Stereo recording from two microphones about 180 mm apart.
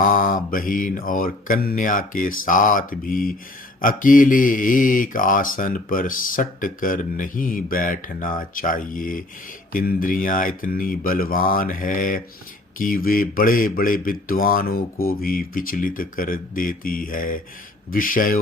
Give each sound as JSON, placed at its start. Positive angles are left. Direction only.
{"t": 0.0, "sound": "speech", "side_deg": 50}